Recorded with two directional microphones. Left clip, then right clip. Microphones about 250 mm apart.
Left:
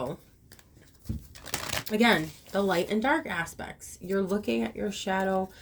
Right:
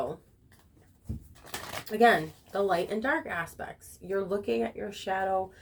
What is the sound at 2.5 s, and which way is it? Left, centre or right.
Speech, left.